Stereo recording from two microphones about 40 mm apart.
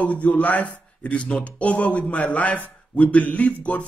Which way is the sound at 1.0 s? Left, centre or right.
Left.